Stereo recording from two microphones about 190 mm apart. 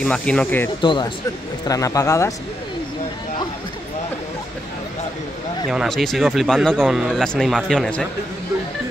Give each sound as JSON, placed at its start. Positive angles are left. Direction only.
{"t": 0.0, "sound": "speech", "side_deg": 5}
{"t": 0.8, "sound": "a man's voice", "side_deg": 25}
{"t": 5.7, "sound": "speech", "side_deg": 0}